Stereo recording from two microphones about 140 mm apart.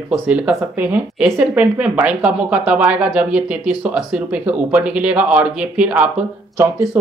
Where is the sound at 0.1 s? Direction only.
5° right (ahead or behind).